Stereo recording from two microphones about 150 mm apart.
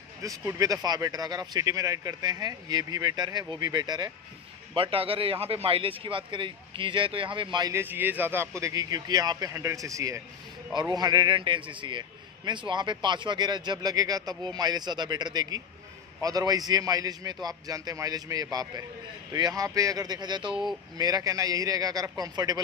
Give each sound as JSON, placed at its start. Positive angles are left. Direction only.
{"t": 0.2, "sound": "a man's voice", "side_deg": -20}
{"t": 7.7, "sound": "a man's voice", "side_deg": -15}